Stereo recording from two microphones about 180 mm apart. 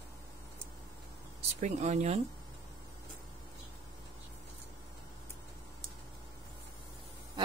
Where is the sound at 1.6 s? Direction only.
40° right (ahead or behind).